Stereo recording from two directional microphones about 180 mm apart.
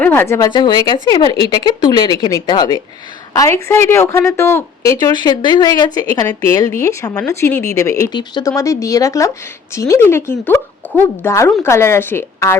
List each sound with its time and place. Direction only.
0.0 s speech: 10° left (ahead or behind)